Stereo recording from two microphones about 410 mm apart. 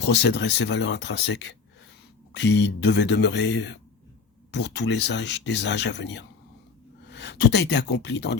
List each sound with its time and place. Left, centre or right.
0.0 s speech: left